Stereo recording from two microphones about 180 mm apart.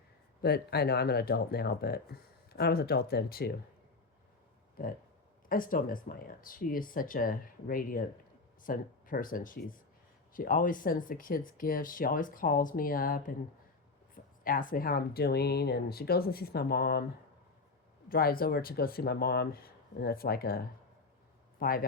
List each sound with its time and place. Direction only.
0.4 s speech: 60° left (ahead or behind)
5.5 s speech: 50° left (ahead or behind)
14.4 s speech: 50° left (ahead or behind)
18.1 s speech: 55° left (ahead or behind)
21.6 s speech: 55° left (ahead or behind)